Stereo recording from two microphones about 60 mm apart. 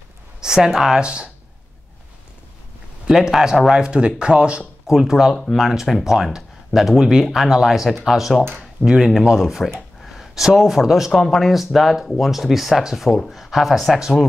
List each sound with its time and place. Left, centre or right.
0.4 s a sound: centre
0.7 s speech: centre
3.1 s speech: centre
3.7 s speech: centre
4.9 s speech: centre